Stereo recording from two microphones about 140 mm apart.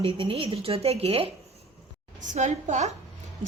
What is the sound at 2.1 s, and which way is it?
Speech, 60° right (ahead or behind).